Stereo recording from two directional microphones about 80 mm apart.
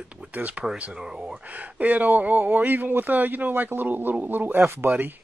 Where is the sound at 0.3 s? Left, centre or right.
Centre.